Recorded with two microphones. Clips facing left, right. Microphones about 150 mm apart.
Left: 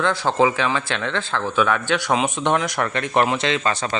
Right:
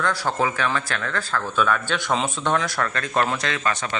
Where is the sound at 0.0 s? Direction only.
25° left (ahead or behind).